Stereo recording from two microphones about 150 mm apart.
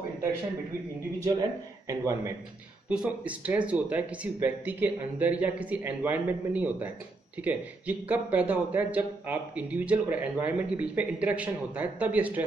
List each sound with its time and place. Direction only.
1.2 s a man's voice: 20° right (ahead or behind)
2.9 s a man's voice: 10° right (ahead or behind)